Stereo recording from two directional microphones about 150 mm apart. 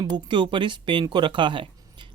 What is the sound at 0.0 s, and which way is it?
Speech, 30° right (ahead or behind).